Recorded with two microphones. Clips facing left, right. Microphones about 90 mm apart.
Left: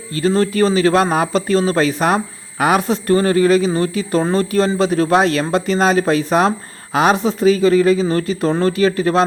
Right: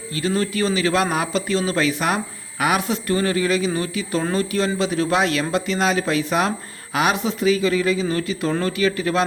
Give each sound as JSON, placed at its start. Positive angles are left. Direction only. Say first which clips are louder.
{"t": 0.1, "sound": "a man's voice", "louder": "left 6 dB", "side_deg": 40}